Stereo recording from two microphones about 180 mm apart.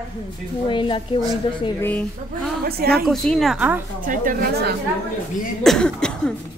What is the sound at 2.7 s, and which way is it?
Speech, 60° right (ahead or behind).